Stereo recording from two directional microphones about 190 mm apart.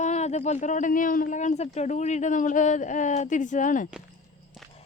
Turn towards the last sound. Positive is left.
turn(degrees=40)  # may be behind; listen again after turning